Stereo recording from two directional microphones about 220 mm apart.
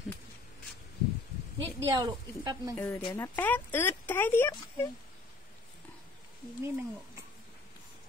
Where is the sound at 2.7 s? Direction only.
10° left (ahead or behind).